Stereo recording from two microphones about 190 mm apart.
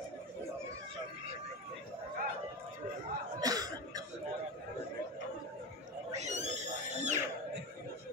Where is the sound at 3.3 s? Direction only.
20° right (ahead or behind).